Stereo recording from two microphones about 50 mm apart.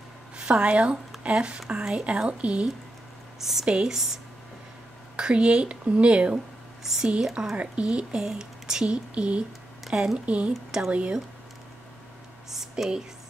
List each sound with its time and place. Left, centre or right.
0.5 s speech: centre
3.3 s speech: centre
3.6 s speech: centre
3.9 s speech: centre
5.1 s speech: right
6.8 s speech: centre
7.5 s speech: right
8.8 s speech: right
9.8 s speech: centre
10.1 s speech: right
10.7 s speech: centre
12.4 s speech: centre